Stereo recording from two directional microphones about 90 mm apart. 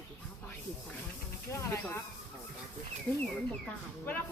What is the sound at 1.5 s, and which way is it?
Speech, 30° left (ahead or behind).